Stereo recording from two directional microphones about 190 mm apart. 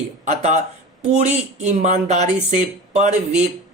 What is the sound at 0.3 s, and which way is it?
Speech, 35° right (ahead or behind).